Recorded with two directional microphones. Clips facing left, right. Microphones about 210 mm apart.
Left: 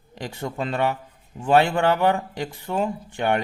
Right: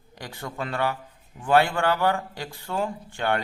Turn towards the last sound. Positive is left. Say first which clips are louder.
# left 3 dB
turn(degrees=20)  # may be behind; listen again after turning